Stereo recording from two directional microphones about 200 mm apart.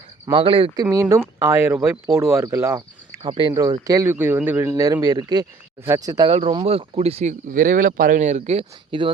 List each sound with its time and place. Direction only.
0.3 s speech: 25° right (ahead or behind)